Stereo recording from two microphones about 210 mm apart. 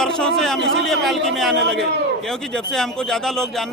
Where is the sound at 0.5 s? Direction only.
60° right (ahead or behind).